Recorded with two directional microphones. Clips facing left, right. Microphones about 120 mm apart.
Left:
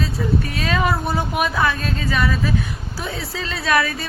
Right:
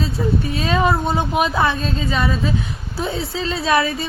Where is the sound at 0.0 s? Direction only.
25° right (ahead or behind).